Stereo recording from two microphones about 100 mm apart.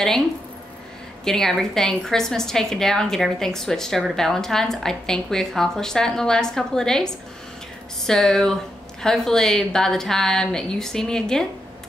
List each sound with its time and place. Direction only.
1.2 s a woman's voice: 5° left (ahead or behind)
8.1 s a woman's voice: 5° left (ahead or behind)